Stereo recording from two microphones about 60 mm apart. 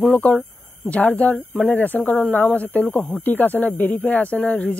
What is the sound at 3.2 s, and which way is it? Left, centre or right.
Speech, left.